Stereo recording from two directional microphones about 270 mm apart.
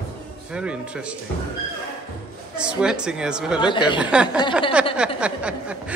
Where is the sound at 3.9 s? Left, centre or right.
Centre.